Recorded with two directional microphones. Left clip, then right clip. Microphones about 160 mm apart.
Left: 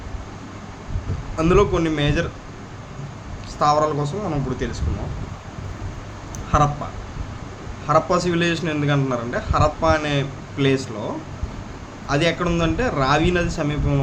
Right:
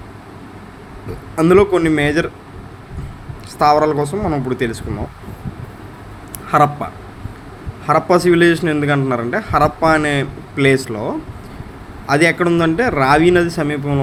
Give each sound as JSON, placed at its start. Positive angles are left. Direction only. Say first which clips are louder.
{"t": 1.4, "sound": "speech", "louder": "right 6 dB", "side_deg": -40}
{"t": 3.6, "sound": "a man's voice", "louder": "right 6 dB", "side_deg": -45}
{"t": 6.5, "sound": "a man's voice", "louder": "right 6 dB", "side_deg": -55}
{"t": 7.9, "sound": "a man's voice", "louder": "right 6 dB", "side_deg": -45}
{"t": 12.0, "sound": "a man's voice", "louder": "right 7 dB", "side_deg": -45}